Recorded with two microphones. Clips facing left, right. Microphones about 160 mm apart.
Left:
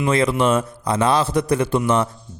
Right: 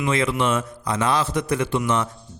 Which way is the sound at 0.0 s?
35° left (ahead or behind).